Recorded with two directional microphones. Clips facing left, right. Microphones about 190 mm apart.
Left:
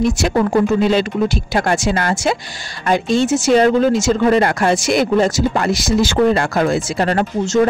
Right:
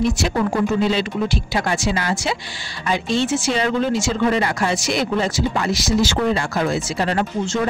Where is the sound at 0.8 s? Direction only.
50° left (ahead or behind).